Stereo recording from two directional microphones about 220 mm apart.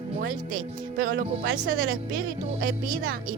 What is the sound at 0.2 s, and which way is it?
Speech, 40° right (ahead or behind).